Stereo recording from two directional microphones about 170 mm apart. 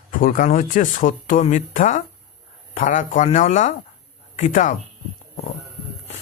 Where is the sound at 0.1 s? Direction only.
55° left (ahead or behind).